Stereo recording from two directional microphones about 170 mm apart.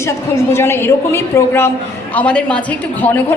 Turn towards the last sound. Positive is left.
turn(degrees=10)  # may be behind; listen again after turning